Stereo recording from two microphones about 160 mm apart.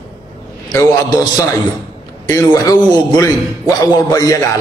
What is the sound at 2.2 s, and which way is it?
A man's voice, 20° left (ahead or behind).